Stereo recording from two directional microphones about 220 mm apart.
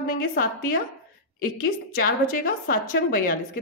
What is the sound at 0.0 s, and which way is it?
A woman's voice, 40° left (ahead or behind).